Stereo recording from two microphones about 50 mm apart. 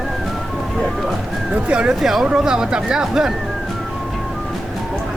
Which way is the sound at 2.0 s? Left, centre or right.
Centre.